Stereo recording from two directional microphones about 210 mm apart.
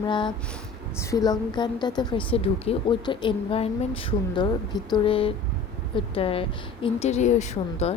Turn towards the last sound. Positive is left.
turn(degrees=30)  # may be behind; listen again after turning